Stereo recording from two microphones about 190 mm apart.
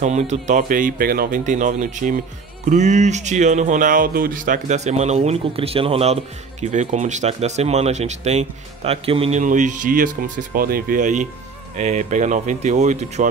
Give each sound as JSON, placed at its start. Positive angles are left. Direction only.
{"t": 0.0, "sound": "speech", "side_deg": -35}
{"t": 9.4, "sound": "speech", "side_deg": -40}